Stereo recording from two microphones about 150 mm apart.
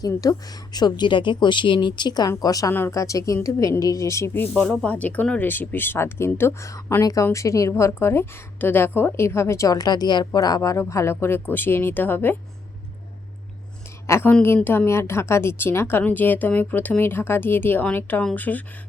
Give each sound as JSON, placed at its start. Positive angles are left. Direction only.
{"t": 0.0, "sound": "speech", "side_deg": 25}
{"t": 4.5, "sound": "a woman's voice", "side_deg": 5}
{"t": 14.1, "sound": "a woman's voice", "side_deg": 15}